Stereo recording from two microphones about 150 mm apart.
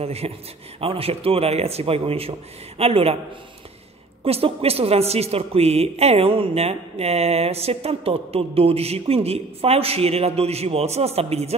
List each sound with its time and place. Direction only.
0.0 s a woman's voice: 45° right (ahead or behind)
4.2 s a woman's voice: 40° right (ahead or behind)